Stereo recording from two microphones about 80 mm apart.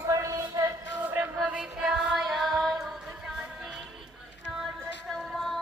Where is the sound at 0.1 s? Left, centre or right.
Right.